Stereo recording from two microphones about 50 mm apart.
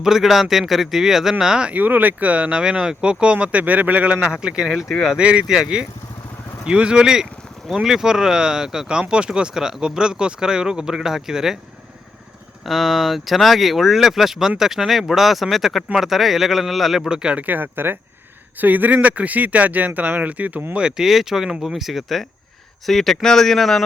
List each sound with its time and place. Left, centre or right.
0.0 s speech: centre
1.7 s speech: right; by 3.3 s centre
3.4 s speech: right
6.7 s speech: centre
12.6 s speech: centre
17.4 s speech: right
20.7 s speech: centre